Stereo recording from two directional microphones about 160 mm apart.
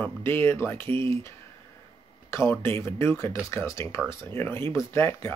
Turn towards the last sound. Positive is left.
turn(degrees=15)  # may be behind; listen again after turning